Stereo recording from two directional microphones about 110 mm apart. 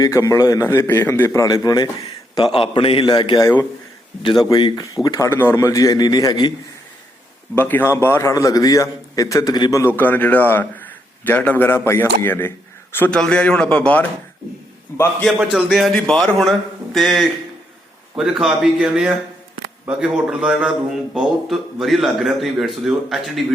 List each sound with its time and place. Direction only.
0.0 s a man's voice: 30° left (ahead or behind)
2.4 s a man's voice: 50° left (ahead or behind)
3.1 s a man's voice: 40° left (ahead or behind)
5.3 s a man's voice: 20° left (ahead or behind); by 6.5 s 40° left (ahead or behind)
7.5 s a man's voice: 20° left (ahead or behind); by 9.8 s 35° left (ahead or behind)
9.8 s a man's voice: 20° left (ahead or behind)
13.1 s a man's voice: 10° left (ahead or behind)
14.9 s a man's voice: 25° left (ahead or behind)
15.4 s a man's voice: 5° right (ahead or behind)